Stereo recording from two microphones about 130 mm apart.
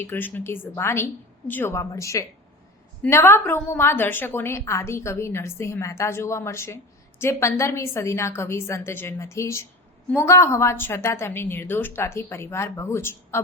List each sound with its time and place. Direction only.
0.0 s a woman's voice: 15° left (ahead or behind)